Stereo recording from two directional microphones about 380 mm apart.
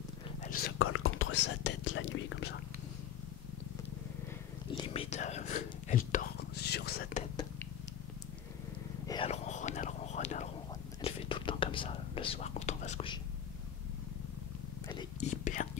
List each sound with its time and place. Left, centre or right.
0.4 s speech: left
4.7 s speech: centre
9.0 s whispering: centre
14.9 s a sound: centre